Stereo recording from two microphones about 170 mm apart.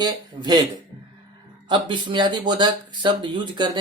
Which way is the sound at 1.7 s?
25° right (ahead or behind).